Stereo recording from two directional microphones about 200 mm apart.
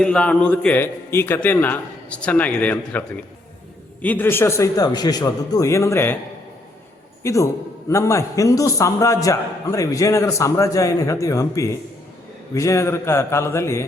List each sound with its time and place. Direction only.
0.0 s a man's voice: 5° left (ahead or behind)
4.0 s a man's voice: 10° left (ahead or behind)
7.2 s a man's voice: 15° left (ahead or behind)